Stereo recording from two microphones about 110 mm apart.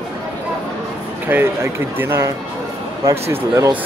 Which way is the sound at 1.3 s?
20° right (ahead or behind).